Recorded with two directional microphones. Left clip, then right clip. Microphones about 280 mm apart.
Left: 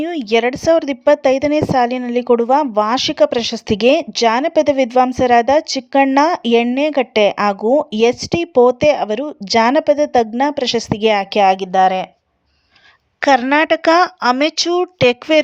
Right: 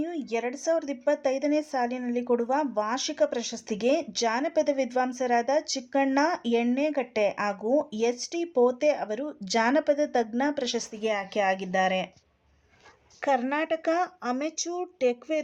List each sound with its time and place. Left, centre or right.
0.0 s speech: left
13.1 s speech: left